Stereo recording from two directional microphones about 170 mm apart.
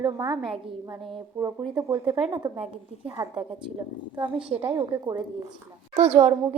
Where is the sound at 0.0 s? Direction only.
30° right (ahead or behind).